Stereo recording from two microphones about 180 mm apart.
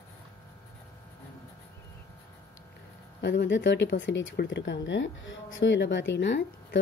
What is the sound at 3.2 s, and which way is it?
Speech, 75° left (ahead or behind).